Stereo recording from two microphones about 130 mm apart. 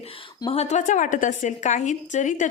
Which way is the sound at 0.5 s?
60° left (ahead or behind).